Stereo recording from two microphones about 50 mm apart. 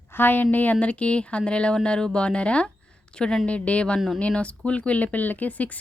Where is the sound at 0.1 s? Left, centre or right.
Left.